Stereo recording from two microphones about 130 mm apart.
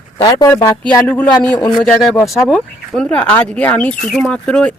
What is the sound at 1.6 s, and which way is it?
Speech, 35° left (ahead or behind).